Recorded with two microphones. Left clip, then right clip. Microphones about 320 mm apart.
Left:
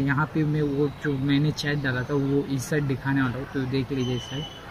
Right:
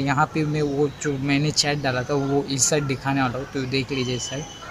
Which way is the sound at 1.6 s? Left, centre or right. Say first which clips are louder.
Right 5 dB; right.